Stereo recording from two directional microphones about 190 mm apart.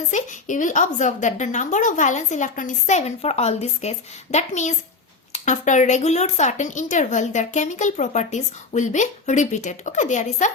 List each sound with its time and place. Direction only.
0.1 s a woman's voice: 40° left (ahead or behind)